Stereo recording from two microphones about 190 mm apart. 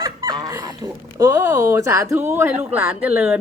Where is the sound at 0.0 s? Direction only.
20° right (ahead or behind).